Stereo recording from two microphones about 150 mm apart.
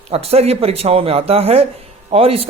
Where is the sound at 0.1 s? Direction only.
40° right (ahead or behind).